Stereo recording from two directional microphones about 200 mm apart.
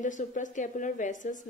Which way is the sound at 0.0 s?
40° left (ahead or behind).